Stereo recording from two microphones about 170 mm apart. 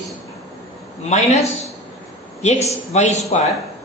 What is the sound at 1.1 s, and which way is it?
Speech, 40° left (ahead or behind).